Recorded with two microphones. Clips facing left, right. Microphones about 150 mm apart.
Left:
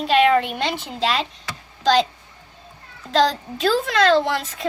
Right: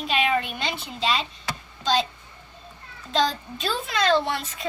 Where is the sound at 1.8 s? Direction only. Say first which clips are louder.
Left 6 dB; 90° left.